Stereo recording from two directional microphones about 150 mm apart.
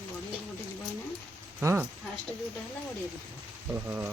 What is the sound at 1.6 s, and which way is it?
Speech, 15° right (ahead or behind).